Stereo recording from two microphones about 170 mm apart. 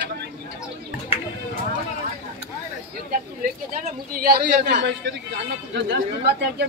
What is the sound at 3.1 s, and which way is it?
A man's voice, 55° right (ahead or behind).